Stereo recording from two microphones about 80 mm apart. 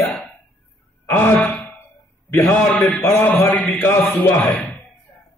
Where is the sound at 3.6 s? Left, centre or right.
Left.